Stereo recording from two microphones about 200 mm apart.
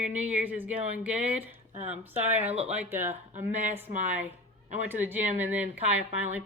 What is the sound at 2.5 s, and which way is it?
Speech, 30° right (ahead or behind).